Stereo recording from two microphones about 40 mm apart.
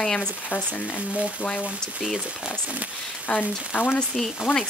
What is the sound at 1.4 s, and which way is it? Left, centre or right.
Speech, left.